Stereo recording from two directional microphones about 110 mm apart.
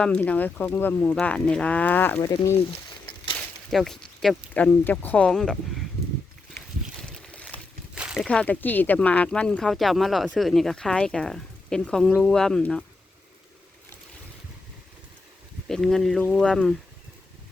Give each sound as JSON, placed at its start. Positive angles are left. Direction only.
{"t": 0.0, "sound": "speech", "side_deg": 10}
{"t": 2.2, "sound": "speech", "side_deg": 30}
{"t": 3.3, "sound": "a sound", "side_deg": 5}
{"t": 4.5, "sound": "speech", "side_deg": 15}
{"t": 7.0, "sound": "boat", "side_deg": 10}
{"t": 7.9, "sound": "a sound", "side_deg": -10}
{"t": 8.2, "sound": "speech", "side_deg": 10}
{"t": 15.7, "sound": "speech", "side_deg": 5}